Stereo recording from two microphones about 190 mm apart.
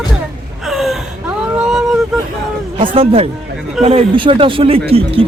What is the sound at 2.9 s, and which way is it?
Speech, 30° right (ahead or behind).